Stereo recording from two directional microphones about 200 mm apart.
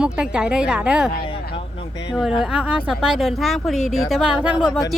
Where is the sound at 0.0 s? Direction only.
5° right (ahead or behind).